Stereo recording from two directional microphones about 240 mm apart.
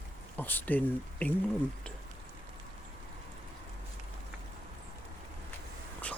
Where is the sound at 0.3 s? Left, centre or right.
Centre.